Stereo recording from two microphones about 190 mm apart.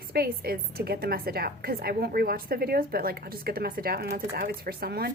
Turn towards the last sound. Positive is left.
turn(degrees=-55)  # may be behind; listen again after turning